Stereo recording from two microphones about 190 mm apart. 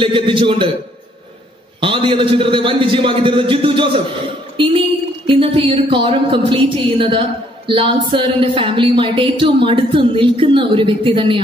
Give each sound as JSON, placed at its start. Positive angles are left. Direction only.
{"t": 0.0, "sound": "speech", "side_deg": -25}
{"t": 1.8, "sound": "speech", "side_deg": -25}